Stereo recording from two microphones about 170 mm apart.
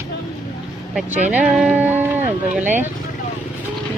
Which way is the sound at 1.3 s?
5° right (ahead or behind).